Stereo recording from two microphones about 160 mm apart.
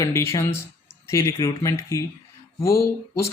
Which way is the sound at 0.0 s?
15° left (ahead or behind).